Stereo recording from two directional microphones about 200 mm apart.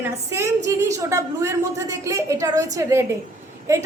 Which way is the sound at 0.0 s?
15° right (ahead or behind).